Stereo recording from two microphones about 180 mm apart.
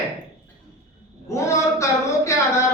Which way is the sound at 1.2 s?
15° left (ahead or behind).